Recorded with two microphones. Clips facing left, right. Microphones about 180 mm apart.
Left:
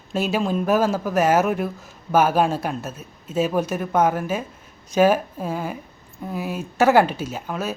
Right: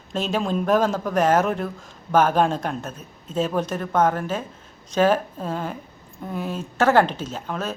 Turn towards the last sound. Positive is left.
turn(degrees=10)  # may be behind; listen again after turning